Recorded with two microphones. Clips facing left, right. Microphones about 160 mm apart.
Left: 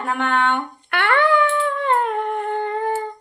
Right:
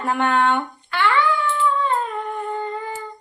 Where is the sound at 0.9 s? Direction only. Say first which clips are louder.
Left 2 dB; 60° left (ahead or behind).